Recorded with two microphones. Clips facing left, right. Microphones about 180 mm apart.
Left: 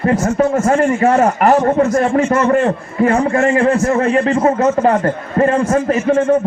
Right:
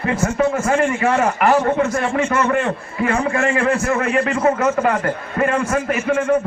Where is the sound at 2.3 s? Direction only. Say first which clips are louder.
Left 5 dB; 30° left (ahead or behind).